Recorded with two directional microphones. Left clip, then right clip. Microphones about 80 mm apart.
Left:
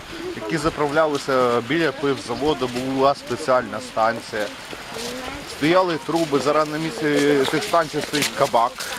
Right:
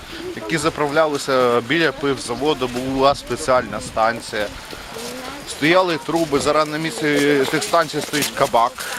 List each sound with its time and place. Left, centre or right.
0.4 s speech: right
0.9 s speech: right
5.6 s speech: right